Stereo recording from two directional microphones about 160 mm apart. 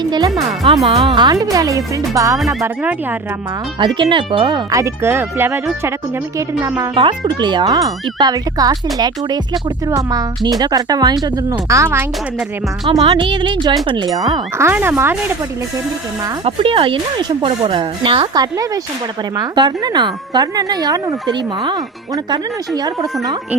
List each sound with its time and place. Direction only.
0.0 s speech: 25° right (ahead or behind)
0.9 s speech: 35° right (ahead or behind)
2.4 s speech: centre (ahead or behind)
2.6 s speech: 10° right (ahead or behind)
3.8 s speech: 30° right (ahead or behind)
6.9 s speech: 30° right (ahead or behind); by 12.5 s 15° right (ahead or behind)
12.9 s speech: 30° right (ahead or behind)
14.7 s speech: 15° right (ahead or behind)
16.4 s speech: 35° right (ahead or behind)